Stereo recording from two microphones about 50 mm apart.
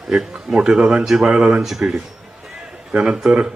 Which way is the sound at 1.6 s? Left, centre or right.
Centre.